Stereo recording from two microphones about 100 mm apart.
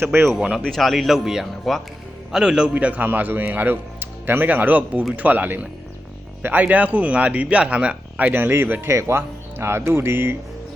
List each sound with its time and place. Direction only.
0.0 s speech: 25° right (ahead or behind)
0.3 s speech: 10° right (ahead or behind)
0.6 s speech: centre (ahead or behind); by 10.3 s 25° right (ahead or behind)